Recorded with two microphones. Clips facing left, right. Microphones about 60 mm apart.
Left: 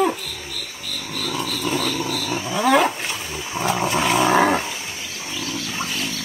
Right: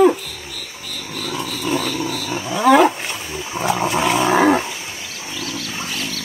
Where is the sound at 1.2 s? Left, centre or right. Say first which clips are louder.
Right 1 dB; centre.